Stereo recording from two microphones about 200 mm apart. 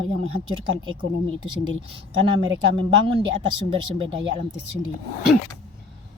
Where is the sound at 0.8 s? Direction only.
25° right (ahead or behind).